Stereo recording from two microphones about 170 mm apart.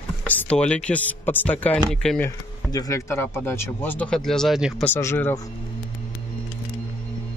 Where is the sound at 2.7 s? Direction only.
20° left (ahead or behind); by 4.7 s centre (ahead or behind).